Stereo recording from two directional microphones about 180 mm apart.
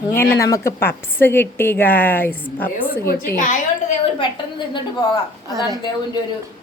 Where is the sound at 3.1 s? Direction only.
50° left (ahead or behind).